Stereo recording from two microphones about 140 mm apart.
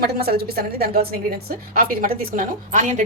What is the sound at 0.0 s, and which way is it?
A woman's voice, 90° right.